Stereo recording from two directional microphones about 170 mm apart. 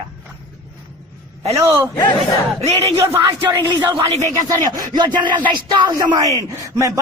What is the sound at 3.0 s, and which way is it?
Speech, 15° right (ahead or behind).